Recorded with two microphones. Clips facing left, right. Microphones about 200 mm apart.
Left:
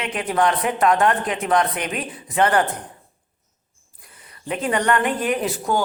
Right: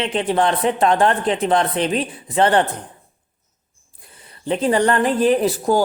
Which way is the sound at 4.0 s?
30° right (ahead or behind).